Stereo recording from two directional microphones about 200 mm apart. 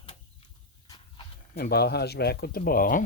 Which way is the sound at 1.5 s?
50° left (ahead or behind).